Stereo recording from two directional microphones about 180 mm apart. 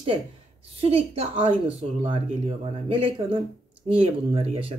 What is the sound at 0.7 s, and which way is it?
Speech, 30° right (ahead or behind).